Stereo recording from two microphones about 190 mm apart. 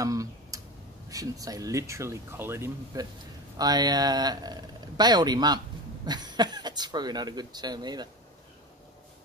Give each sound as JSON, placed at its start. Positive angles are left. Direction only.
{"t": 0.0, "sound": "tick-tock", "side_deg": -20}
{"t": 1.0, "sound": "speech", "side_deg": -20}